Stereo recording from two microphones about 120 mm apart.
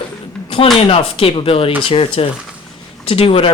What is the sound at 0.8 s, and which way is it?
Speech, 50° left (ahead or behind).